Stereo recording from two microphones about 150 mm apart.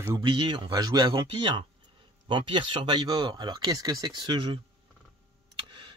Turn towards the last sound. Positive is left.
turn(degrees=-35)  # may be behind; listen again after turning